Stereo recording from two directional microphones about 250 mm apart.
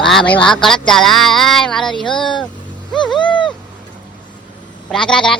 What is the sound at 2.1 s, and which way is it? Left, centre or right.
Speech, centre.